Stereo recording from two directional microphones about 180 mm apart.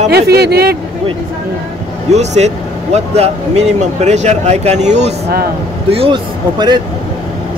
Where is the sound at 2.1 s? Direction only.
40° right (ahead or behind).